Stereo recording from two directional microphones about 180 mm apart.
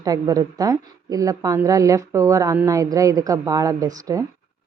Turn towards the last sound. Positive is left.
turn(degrees=-20)  # may be behind; listen again after turning